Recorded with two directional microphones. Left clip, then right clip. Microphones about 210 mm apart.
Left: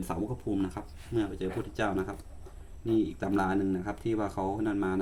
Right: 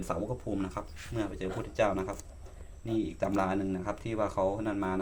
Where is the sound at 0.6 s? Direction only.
5° right (ahead or behind).